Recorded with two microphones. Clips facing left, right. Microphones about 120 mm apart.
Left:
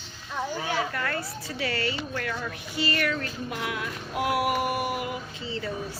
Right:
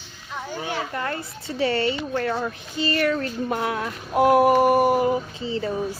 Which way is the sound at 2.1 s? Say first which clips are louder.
Right 7 dB; 35° right (ahead or behind).